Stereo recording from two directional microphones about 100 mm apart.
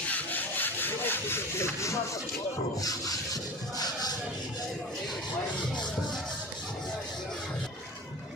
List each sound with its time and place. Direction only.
0.1 s sawing: 15° left (ahead or behind)
3.8 s music: 40° left (ahead or behind)